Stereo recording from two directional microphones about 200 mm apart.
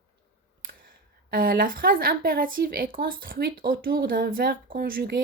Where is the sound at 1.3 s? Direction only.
45° right (ahead or behind).